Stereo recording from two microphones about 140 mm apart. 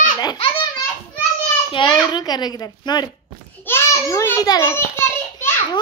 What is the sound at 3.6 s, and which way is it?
Speech, 20° left (ahead or behind).